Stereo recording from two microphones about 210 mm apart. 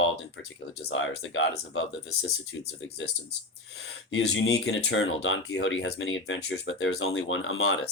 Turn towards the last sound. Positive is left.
turn(degrees=75)  # may be behind; listen again after turning